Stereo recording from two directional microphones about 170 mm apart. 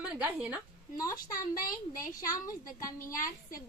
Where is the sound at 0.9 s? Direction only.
20° left (ahead or behind).